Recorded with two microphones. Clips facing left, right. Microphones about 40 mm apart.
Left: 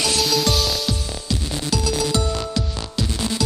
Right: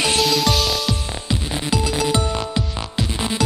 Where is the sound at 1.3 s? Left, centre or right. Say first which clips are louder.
Right 2 dB; right.